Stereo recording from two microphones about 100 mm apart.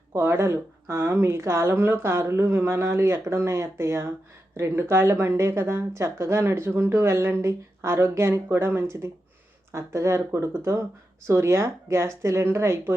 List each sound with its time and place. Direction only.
0.1 s speech: 25° right (ahead or behind)